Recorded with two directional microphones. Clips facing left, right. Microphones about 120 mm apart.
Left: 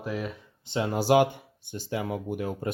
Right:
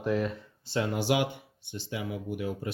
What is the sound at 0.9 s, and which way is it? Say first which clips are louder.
Speech: left 9 dB; 40° left (ahead or behind).